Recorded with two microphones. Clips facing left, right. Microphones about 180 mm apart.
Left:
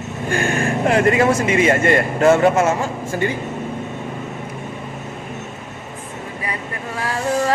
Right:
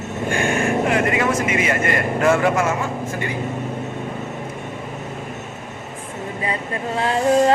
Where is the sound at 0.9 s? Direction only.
35° left (ahead or behind).